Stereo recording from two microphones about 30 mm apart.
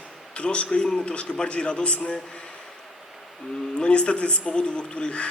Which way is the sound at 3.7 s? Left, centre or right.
Left.